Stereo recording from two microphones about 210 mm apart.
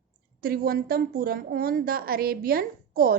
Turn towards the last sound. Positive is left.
turn(degrees=-45)  # may be behind; listen again after turning